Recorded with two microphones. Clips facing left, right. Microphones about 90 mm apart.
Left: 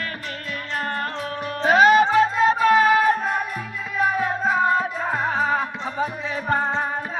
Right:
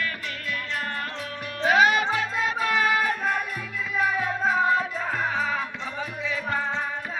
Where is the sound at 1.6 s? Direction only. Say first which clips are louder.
Left 5 dB; 35° left (ahead or behind).